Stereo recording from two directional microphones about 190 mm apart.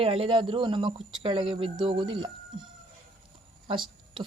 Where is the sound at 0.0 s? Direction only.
30° right (ahead or behind).